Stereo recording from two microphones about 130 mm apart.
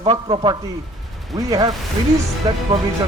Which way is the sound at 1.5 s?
25° right (ahead or behind).